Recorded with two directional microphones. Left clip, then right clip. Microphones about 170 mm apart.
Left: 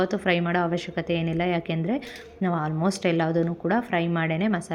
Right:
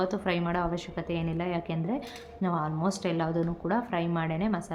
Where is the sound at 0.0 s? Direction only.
25° left (ahead or behind).